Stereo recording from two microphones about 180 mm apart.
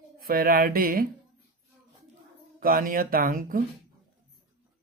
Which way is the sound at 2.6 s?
50° right (ahead or behind).